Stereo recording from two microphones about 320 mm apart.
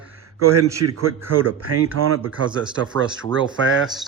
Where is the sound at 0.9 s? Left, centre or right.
Right.